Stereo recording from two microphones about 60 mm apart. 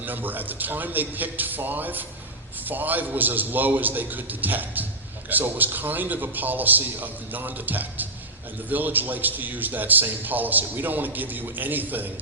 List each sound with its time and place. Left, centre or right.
0.0 s a man's voice: right